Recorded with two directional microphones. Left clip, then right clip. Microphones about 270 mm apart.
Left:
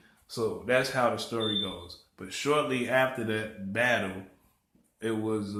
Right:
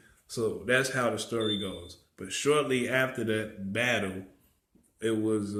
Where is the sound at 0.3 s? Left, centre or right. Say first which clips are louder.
Even; centre.